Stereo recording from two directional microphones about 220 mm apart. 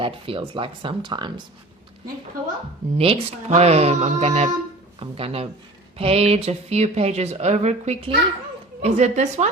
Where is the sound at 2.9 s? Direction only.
25° right (ahead or behind).